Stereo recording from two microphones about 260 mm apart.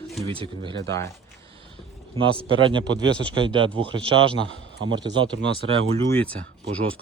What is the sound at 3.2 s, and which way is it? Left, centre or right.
Speech, centre.